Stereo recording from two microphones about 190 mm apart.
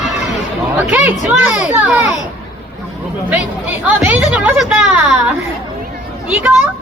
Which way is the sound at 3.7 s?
10° right (ahead or behind).